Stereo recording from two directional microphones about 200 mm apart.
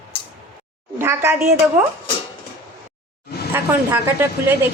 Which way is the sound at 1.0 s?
15° right (ahead or behind).